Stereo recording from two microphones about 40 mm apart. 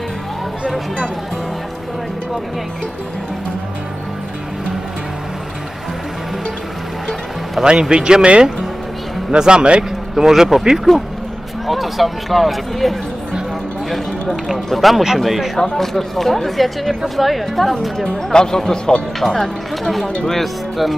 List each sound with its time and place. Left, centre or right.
7.6 s speech: right
10.2 s speech: centre
11.6 s a man's voice: centre
15.5 s speech: centre
15.8 s a man's voice: centre
18.3 s a man's voice: centre